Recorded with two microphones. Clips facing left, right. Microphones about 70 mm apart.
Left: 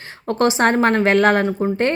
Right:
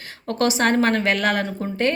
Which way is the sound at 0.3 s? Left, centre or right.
Left.